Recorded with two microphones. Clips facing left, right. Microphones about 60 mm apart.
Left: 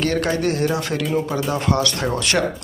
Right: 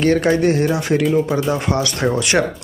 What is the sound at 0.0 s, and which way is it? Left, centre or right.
Speech, right.